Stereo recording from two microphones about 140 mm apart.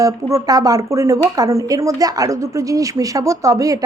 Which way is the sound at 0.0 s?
25° right (ahead or behind).